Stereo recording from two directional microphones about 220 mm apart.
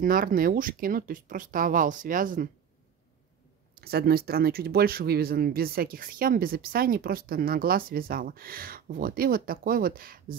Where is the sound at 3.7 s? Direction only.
45° right (ahead or behind).